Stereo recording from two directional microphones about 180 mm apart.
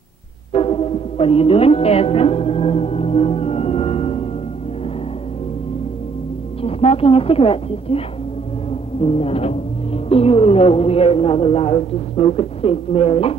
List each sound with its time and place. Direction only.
0.5 s music: 30° left (ahead or behind)
6.6 s a woman's voice: 35° left (ahead or behind)
9.0 s a woman's voice: 35° left (ahead or behind)